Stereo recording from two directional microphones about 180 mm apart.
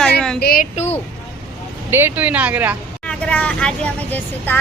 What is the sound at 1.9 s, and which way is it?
Speech, 15° right (ahead or behind).